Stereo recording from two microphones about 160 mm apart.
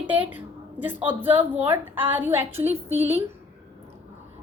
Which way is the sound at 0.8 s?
10° right (ahead or behind).